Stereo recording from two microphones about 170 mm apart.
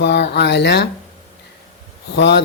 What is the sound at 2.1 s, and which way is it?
Speech, 90° left.